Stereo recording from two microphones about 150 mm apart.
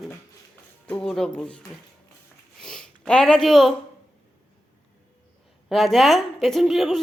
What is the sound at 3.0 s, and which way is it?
Speech, 5° left (ahead or behind).